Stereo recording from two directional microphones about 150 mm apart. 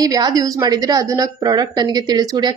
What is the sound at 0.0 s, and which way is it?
A woman's voice, 25° right (ahead or behind).